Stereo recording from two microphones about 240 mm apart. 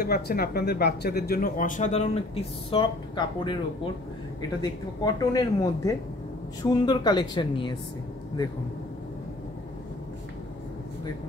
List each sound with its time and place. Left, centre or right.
0.0 s speech: left; by 7.7 s centre